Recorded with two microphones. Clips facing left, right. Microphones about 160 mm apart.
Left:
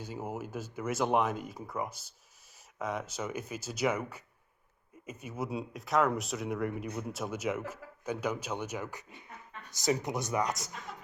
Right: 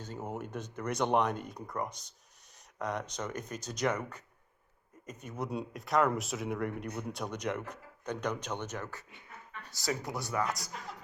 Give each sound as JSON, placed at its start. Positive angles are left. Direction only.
{"t": 0.0, "sound": "speech", "side_deg": 10}